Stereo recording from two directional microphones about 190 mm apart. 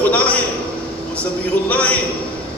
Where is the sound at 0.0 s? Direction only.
5° left (ahead or behind).